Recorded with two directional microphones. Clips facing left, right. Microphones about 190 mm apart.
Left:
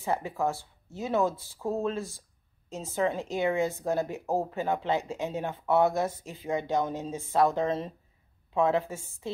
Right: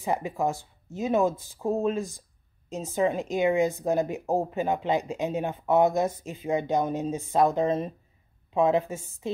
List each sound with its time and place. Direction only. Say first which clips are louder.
0.0 s speech: right 2 dB; 15° right (ahead or behind)